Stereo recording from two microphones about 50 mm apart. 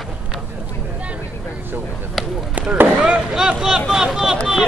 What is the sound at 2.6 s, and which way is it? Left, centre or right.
Speech, right.